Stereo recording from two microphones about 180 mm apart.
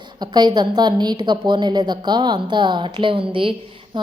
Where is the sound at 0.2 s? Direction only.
25° right (ahead or behind).